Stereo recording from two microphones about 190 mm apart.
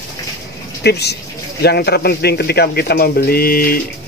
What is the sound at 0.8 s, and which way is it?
Speech, 60° left (ahead or behind).